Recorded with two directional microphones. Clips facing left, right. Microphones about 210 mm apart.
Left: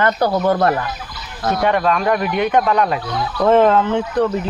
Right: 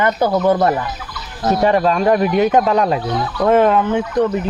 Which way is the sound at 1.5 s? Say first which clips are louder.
Right 3 dB; 30° right (ahead or behind).